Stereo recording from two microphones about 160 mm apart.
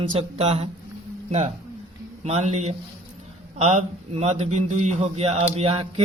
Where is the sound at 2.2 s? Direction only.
40° right (ahead or behind).